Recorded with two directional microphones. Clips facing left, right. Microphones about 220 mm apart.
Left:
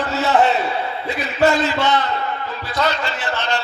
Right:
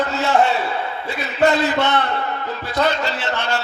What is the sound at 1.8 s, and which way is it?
A man's voice, 60° right (ahead or behind).